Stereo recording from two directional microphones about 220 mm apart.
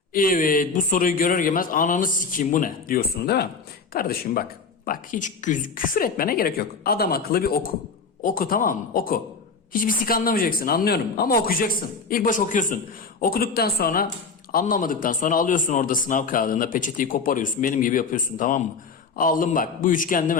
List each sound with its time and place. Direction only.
0.1 s speech: 40° left (ahead or behind)